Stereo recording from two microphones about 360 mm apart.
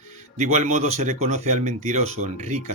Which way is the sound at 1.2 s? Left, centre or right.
Right.